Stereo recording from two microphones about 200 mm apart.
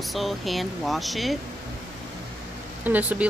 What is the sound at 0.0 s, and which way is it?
Speech, centre (ahead or behind).